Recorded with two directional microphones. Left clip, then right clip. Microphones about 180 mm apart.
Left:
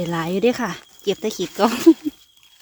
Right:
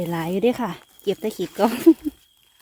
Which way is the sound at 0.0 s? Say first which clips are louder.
Left 2 dB; centre (ahead or behind).